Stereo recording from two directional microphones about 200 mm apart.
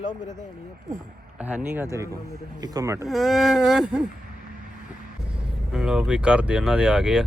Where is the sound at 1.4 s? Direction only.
5° right (ahead or behind).